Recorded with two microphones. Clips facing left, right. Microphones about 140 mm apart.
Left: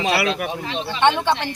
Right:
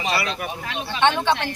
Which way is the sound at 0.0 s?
75° left (ahead or behind).